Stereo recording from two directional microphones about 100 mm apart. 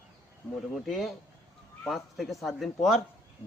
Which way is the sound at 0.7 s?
Centre (ahead or behind).